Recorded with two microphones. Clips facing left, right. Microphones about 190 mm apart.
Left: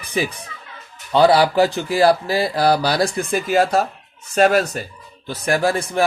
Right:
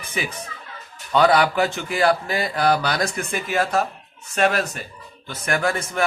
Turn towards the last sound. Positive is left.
turn(degrees=35)  # may be behind; listen again after turning